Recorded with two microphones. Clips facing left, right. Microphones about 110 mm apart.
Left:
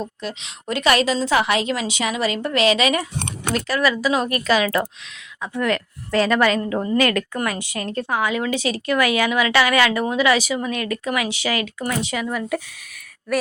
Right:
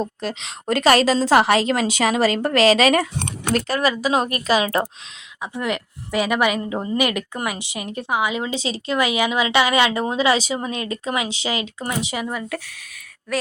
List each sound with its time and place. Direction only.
0.2 s a woman's voice: 40° right (ahead or behind)
5.4 s a woman's voice: 15° right (ahead or behind)